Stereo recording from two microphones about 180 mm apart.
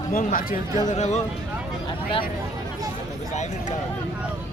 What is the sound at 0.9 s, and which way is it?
Speech, 40° left (ahead or behind).